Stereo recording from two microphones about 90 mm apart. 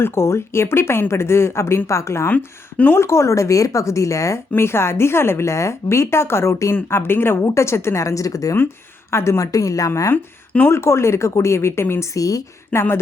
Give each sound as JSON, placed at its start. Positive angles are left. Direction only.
{"t": 0.0, "sound": "speech", "side_deg": 30}
{"t": 2.3, "sound": "a woman's voice", "side_deg": 20}
{"t": 10.1, "sound": "a woman's voice", "side_deg": 25}